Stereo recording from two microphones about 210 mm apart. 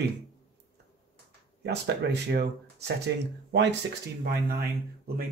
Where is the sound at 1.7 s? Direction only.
50° right (ahead or behind).